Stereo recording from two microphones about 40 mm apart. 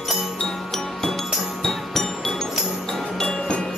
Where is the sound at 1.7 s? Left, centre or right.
Centre.